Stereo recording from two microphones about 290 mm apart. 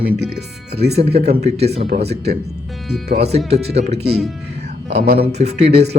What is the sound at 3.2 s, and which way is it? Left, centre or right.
Speech, right.